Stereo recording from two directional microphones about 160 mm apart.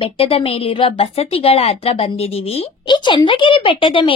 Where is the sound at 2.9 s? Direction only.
30° left (ahead or behind).